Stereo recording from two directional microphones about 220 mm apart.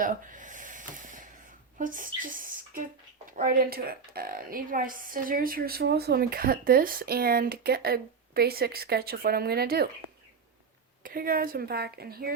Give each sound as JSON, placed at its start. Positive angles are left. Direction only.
{"t": 0.0, "sound": "a sound", "side_deg": -35}
{"t": 1.8, "sound": "speech", "side_deg": -40}
{"t": 11.0, "sound": "a woman's voice", "side_deg": -40}